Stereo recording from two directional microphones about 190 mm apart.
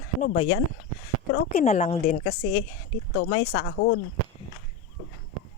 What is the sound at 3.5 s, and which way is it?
Speech, 55° left (ahead or behind).